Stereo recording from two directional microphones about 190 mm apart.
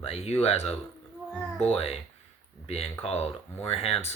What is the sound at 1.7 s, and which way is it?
Speech, 30° left (ahead or behind).